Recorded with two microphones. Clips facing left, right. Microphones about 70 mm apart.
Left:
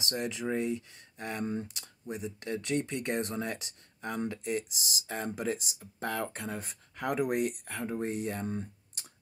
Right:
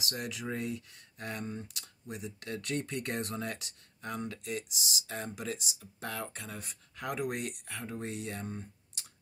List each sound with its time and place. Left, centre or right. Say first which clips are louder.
0.1 s speech: left 6 dB; left